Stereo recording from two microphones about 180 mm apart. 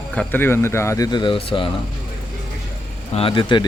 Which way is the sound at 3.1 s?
30° left (ahead or behind).